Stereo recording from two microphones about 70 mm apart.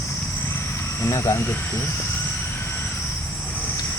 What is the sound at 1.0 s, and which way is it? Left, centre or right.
Speech, left.